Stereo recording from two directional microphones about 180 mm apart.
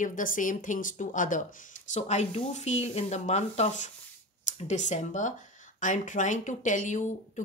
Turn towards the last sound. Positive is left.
turn(degrees=45)  # may be behind; listen again after turning